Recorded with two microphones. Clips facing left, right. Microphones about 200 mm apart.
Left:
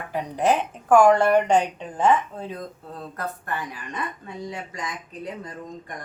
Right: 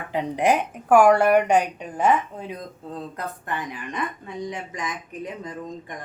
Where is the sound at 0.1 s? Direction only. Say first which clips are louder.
Right 1 dB; 20° right (ahead or behind).